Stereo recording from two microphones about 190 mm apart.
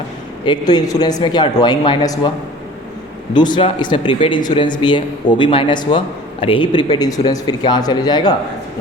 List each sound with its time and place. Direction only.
0.4 s speech: 20° left (ahead or behind)
3.3 s speech: 25° left (ahead or behind)